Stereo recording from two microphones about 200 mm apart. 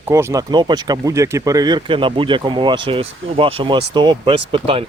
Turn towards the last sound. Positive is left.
turn(degrees=-25)  # may be behind; listen again after turning